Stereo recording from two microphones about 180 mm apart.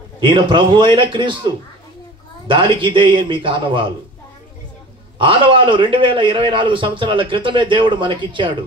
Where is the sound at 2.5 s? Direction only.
30° right (ahead or behind).